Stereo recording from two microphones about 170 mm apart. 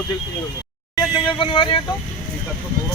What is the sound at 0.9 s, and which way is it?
Speech, 25° left (ahead or behind).